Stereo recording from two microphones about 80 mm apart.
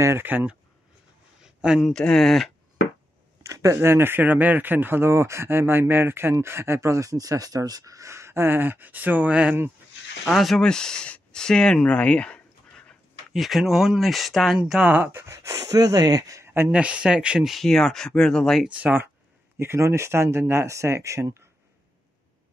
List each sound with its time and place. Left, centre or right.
0.0 s speech: right
1.4 s a sound: centre
1.9 s speech: centre
3.4 s speech: right; by 9.6 s centre
10.2 s speech: centre
13.3 s speech: centre
14.9 s speech: right
15.2 s speech: right
16.4 s a sound: right
16.7 s speech: centre
18.7 s speech: centre
19.6 s speech: right